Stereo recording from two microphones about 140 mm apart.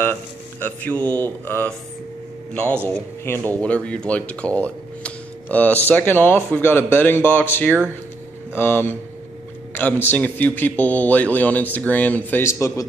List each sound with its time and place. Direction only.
0.0 s a man's voice: 15° left (ahead or behind)